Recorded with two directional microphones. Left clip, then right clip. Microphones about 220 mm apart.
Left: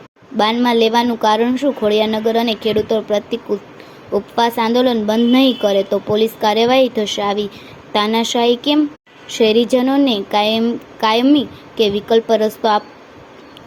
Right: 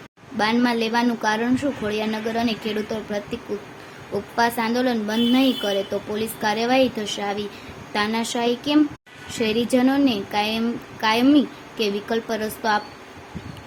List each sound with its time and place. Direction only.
0.3 s a woman's voice: 15° left (ahead or behind)